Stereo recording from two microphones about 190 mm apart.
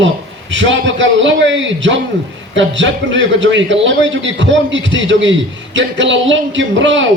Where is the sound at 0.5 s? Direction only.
75° right (ahead or behind).